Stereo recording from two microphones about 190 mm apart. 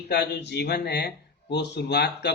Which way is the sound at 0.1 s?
60° left (ahead or behind).